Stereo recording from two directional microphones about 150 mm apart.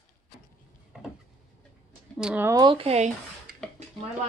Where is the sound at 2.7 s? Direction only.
40° right (ahead or behind).